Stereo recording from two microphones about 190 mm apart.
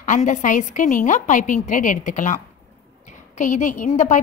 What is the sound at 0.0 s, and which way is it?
A woman's voice, 40° left (ahead or behind).